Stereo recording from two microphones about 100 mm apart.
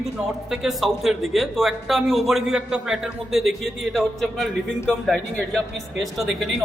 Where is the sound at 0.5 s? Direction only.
5° right (ahead or behind).